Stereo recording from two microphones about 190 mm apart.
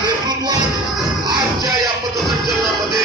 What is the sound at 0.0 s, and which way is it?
Music, 20° right (ahead or behind).